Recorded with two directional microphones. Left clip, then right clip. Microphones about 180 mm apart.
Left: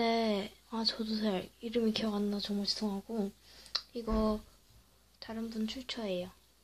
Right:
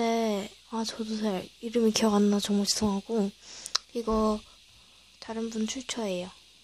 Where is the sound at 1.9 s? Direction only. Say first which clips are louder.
Right 10 dB; 40° right (ahead or behind).